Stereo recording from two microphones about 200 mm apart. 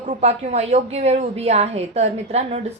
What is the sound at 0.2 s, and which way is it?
A woman's voice, 30° right (ahead or behind).